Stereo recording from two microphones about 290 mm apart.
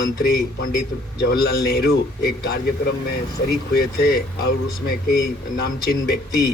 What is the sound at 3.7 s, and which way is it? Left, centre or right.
Speech, left.